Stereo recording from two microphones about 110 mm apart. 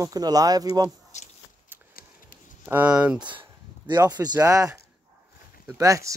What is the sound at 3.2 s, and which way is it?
Speech, 45° right (ahead or behind).